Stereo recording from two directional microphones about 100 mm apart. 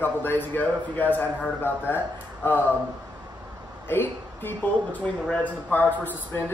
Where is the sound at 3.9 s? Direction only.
20° left (ahead or behind).